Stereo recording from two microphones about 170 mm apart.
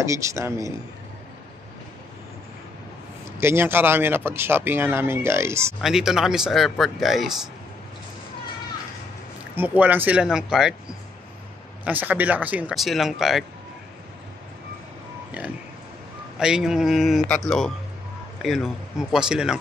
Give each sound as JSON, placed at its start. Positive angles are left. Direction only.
{"t": 0.0, "sound": "speech", "side_deg": -15}
{"t": 3.3, "sound": "speech", "side_deg": -15}
{"t": 5.8, "sound": "speech", "side_deg": -5}
{"t": 9.6, "sound": "speech", "side_deg": -10}
{"t": 11.8, "sound": "speech", "side_deg": -10}
{"t": 16.3, "sound": "speech", "side_deg": -5}